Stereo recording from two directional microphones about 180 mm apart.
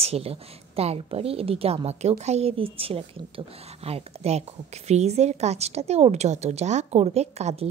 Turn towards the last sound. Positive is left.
turn(degrees=-35)  # may be behind; listen again after turning